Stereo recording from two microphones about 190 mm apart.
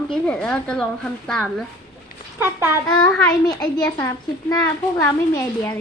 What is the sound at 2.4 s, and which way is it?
Speech, 10° right (ahead or behind).